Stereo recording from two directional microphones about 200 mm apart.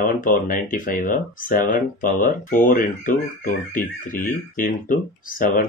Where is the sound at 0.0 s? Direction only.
45° left (ahead or behind).